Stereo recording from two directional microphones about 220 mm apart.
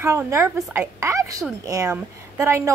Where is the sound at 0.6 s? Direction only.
Centre (ahead or behind).